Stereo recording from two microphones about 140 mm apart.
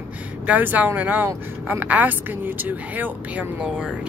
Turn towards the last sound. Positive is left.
turn(degrees=-10)  # may be behind; listen again after turning